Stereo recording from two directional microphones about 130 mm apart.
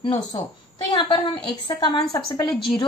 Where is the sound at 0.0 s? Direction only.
45° left (ahead or behind).